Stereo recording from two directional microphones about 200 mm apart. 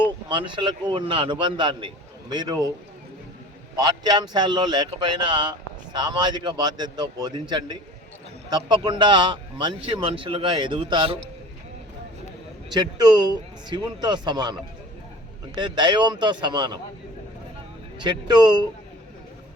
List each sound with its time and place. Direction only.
0.3 s speech: 25° right (ahead or behind)
3.8 s speech: 20° right (ahead or behind)
12.7 s speech: 20° right (ahead or behind)
15.5 s speech: 20° right (ahead or behind)
18.0 s speech: 20° right (ahead or behind)